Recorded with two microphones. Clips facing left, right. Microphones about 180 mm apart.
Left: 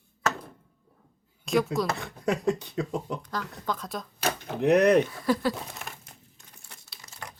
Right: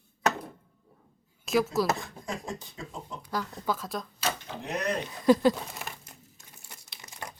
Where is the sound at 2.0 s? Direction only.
70° left (ahead or behind).